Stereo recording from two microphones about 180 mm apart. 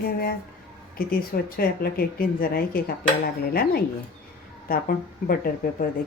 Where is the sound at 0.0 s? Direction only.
55° left (ahead or behind).